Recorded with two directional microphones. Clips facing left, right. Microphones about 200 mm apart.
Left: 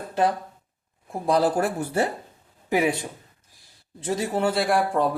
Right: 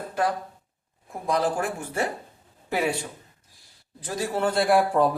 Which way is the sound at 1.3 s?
35° left (ahead or behind).